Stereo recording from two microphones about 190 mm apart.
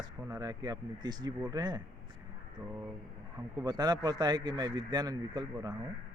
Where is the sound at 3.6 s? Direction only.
20° right (ahead or behind).